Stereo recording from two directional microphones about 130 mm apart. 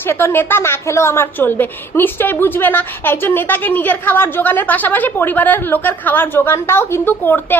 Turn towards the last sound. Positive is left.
turn(degrees=15)  # may be behind; listen again after turning